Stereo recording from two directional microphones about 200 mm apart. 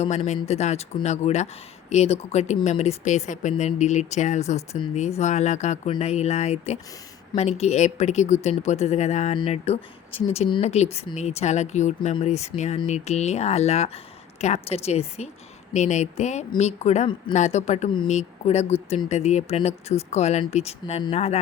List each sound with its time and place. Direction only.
0.0 s speech: 35° left (ahead or behind)